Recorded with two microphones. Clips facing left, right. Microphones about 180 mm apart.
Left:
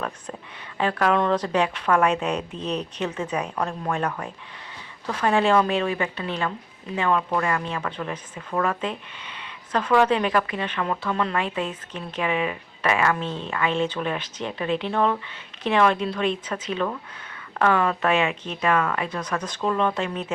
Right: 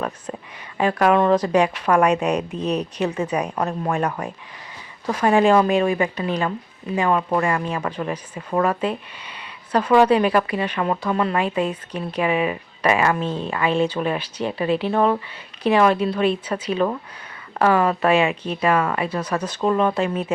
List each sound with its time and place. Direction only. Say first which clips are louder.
0.8 s speech: right 4 dB; 10° right (ahead or behind)
8.4 s speech: right 5 dB; 25° right (ahead or behind)
8.8 s speech: right 5 dB; 10° right (ahead or behind)
16.7 s speech: right 5 dB; 25° right (ahead or behind)
17.6 s speech: right 3 dB; 10° right (ahead or behind)